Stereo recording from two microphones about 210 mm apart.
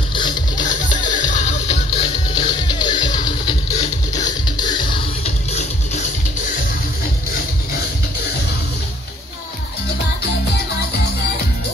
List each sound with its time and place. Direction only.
0.1 s music: 20° left (ahead or behind)
0.6 s music: 35° left (ahead or behind)
4.6 s music: 20° left (ahead or behind)